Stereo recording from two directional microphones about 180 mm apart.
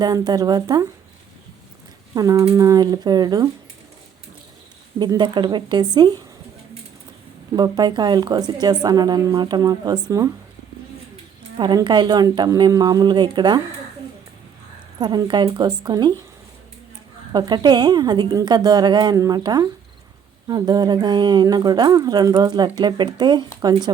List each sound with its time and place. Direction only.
0.0 s speech: 20° right (ahead or behind)
2.1 s speech: 20° right (ahead or behind)
4.9 s speech: 25° right (ahead or behind)
7.5 s speech: 25° right (ahead or behind)
11.5 s speech: 25° right (ahead or behind)
14.9 s speech: 25° right (ahead or behind)
17.3 s speech: 25° right (ahead or behind)